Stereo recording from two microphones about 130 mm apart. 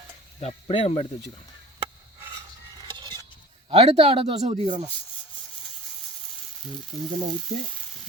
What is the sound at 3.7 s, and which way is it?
Speech, 50° right (ahead or behind).